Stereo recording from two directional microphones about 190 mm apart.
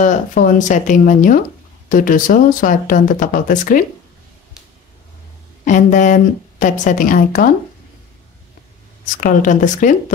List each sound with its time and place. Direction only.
0.0 s speech: 45° left (ahead or behind)
5.7 s a woman's voice: 40° left (ahead or behind)
9.2 s speech: 45° left (ahead or behind)